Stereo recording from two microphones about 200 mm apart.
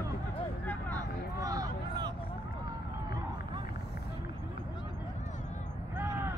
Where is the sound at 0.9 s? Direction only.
15° right (ahead or behind).